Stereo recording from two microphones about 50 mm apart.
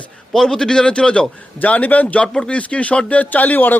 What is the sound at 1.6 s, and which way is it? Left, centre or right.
Speech, left.